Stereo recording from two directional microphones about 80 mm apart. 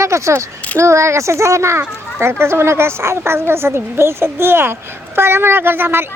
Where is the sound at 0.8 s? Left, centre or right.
Right.